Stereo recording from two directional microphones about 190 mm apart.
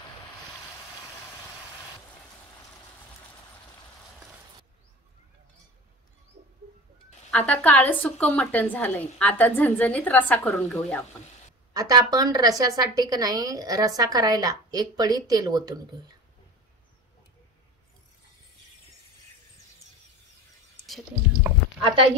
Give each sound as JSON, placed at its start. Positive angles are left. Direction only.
{"t": 7.2, "sound": "a woman's voice", "side_deg": 5}
{"t": 11.7, "sound": "a woman's voice", "side_deg": -20}